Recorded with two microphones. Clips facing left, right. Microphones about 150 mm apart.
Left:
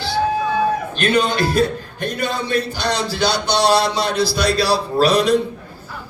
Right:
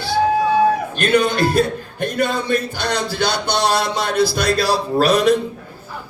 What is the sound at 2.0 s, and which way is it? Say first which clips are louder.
A man's voice: right 3 dB; 50° right (ahead or behind).